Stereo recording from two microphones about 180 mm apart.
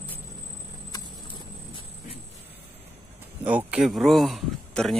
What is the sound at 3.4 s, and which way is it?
Speech, 10° right (ahead or behind).